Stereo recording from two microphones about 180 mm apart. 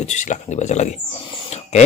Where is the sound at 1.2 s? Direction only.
40° left (ahead or behind).